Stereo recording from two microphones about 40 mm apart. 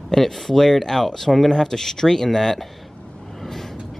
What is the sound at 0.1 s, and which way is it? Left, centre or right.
Speech, centre.